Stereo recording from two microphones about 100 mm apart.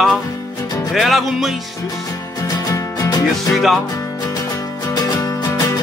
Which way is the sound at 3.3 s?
Centre (ahead or behind).